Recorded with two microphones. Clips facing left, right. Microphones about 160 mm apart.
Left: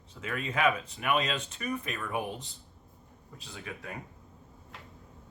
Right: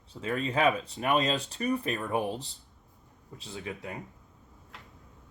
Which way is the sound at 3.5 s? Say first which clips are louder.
Right 4 dB; 25° right (ahead or behind).